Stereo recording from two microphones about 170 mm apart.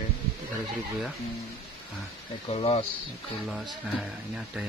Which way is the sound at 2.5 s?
35° left (ahead or behind).